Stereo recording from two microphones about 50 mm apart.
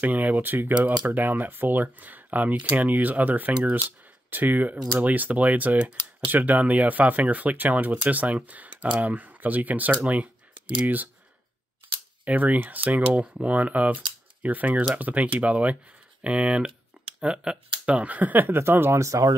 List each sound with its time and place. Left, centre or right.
0.0 s speech: right
12.3 s speech: right
18.6 s speech: right
18.9 s speech: right